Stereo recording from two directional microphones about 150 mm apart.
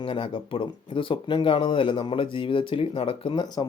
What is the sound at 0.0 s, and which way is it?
Speech, 35° left (ahead or behind).